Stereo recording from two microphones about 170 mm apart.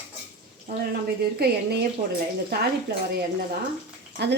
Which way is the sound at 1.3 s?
70° right (ahead or behind).